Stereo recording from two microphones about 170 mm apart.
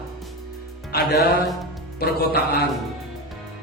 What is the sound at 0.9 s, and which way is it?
Speech, 70° left (ahead or behind).